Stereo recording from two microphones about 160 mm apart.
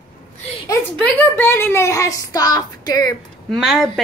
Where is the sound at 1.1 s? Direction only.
15° left (ahead or behind).